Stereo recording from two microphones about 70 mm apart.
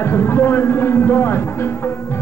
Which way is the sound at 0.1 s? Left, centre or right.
Left.